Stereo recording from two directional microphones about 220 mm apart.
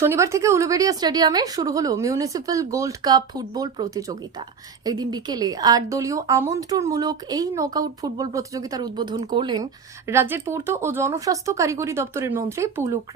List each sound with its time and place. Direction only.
0.0 s speech: 10° right (ahead or behind)
10.1 s speech: 10° right (ahead or behind)